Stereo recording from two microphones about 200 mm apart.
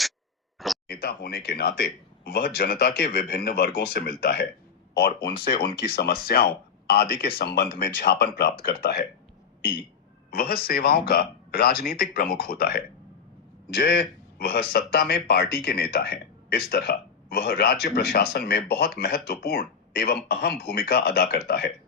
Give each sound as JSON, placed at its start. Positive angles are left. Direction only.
{"t": 0.6, "sound": "a sound", "side_deg": 0}
{"t": 1.0, "sound": "a man's voice", "side_deg": 50}
{"t": 10.3, "sound": "a man's voice", "side_deg": 50}